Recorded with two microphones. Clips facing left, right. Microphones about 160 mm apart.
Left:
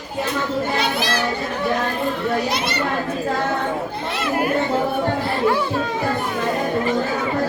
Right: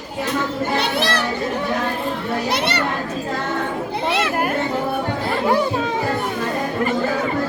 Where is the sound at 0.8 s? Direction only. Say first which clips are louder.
Right 1 dB; 65° right (ahead or behind).